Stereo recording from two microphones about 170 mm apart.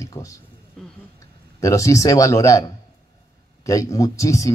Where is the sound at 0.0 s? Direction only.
20° left (ahead or behind).